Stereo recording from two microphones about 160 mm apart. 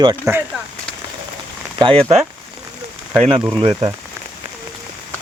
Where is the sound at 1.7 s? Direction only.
35° right (ahead or behind).